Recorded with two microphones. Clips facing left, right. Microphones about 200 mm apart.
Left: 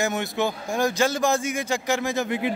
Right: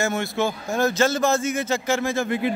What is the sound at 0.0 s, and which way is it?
Speech, 15° left (ahead or behind).